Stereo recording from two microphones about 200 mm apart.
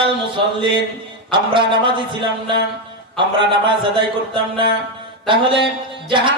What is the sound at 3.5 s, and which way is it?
A man's voice, 25° right (ahead or behind).